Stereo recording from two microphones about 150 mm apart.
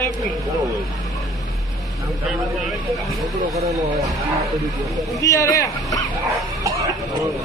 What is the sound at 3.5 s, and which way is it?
Speech, 20° right (ahead or behind).